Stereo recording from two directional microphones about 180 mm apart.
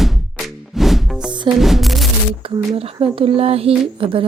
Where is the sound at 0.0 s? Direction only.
Centre (ahead or behind).